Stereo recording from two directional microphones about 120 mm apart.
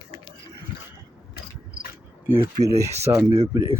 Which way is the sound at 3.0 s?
20° right (ahead or behind).